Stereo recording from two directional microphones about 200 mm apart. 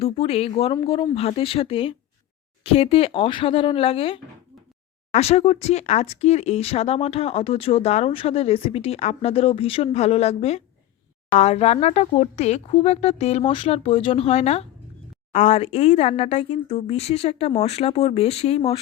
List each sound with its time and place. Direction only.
0.0 s speech: 30° left (ahead or behind)